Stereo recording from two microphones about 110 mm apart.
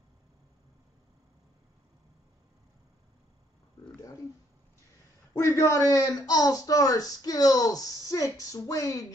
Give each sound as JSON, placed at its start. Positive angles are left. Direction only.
{"t": 5.3, "sound": "speech", "side_deg": 25}